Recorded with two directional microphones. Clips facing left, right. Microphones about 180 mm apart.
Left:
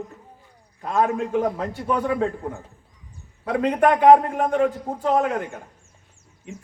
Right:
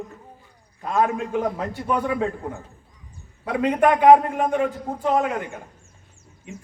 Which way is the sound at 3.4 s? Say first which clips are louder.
Even; 5° right (ahead or behind).